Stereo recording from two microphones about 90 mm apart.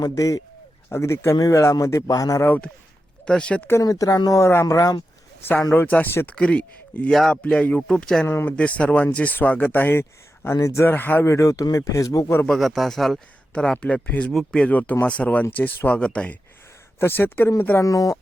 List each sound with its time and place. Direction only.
0.0 s speech: 40° left (ahead or behind)
0.9 s speech: 30° left (ahead or behind)
2.4 s speech: 20° left (ahead or behind)
3.8 s speech: 40° left (ahead or behind)
5.7 s speech: 20° left (ahead or behind)
7.1 s speech: 5° left (ahead or behind)
7.4 s speech: 15° left (ahead or behind)
8.3 s speech: 20° left (ahead or behind)
11.3 s speech: 35° left (ahead or behind)
12.5 s speech: centre (ahead or behind); by 17.8 s 25° left (ahead or behind)
17.8 s speech: 40° left (ahead or behind)